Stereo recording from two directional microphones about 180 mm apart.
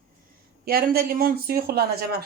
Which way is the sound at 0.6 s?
55° right (ahead or behind).